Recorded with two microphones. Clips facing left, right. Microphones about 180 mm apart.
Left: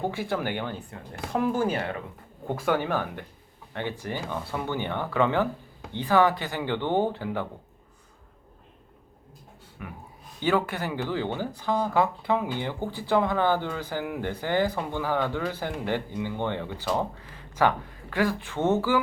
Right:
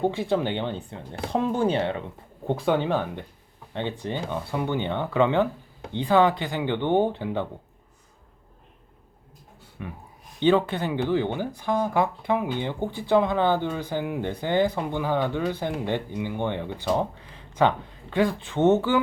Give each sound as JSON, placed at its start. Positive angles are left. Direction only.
{"t": 0.0, "sound": "speech", "side_deg": -20}
{"t": 10.4, "sound": "speech", "side_deg": -20}